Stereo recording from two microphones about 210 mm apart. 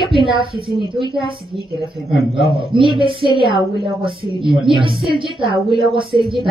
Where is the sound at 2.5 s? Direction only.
25° right (ahead or behind).